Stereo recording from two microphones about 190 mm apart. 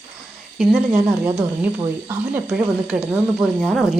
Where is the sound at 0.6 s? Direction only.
5° right (ahead or behind).